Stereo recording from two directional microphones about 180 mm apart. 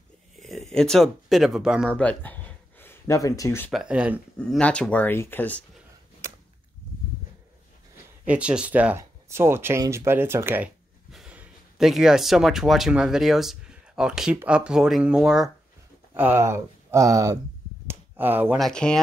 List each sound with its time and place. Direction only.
0.4 s speech: centre (ahead or behind)
1.9 s speech: 5° left (ahead or behind)
3.7 s speech: 5° right (ahead or behind)
4.4 s speech: 5° left (ahead or behind)
8.3 s speech: 5° right (ahead or behind)
17.8 s finger snapping: 10° right (ahead or behind)
18.6 s speech: 5° left (ahead or behind)